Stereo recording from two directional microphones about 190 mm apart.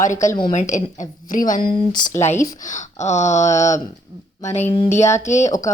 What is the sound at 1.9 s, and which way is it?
Speech, 20° left (ahead or behind).